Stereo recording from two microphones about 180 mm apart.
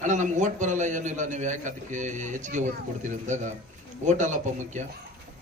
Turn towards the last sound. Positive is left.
turn(degrees=-40)  # may be behind; listen again after turning